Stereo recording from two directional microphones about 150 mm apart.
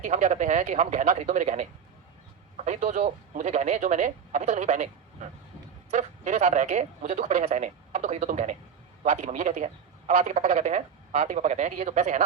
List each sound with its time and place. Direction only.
0.0 s speech: 55° right (ahead or behind)
2.6 s speech: 55° right (ahead or behind)
5.9 s speech: 50° right (ahead or behind)